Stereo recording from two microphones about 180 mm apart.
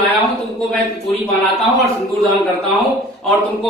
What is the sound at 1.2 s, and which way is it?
A man's voice, centre (ahead or behind).